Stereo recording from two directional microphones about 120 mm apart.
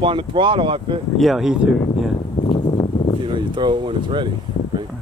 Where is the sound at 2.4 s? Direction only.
40° left (ahead or behind).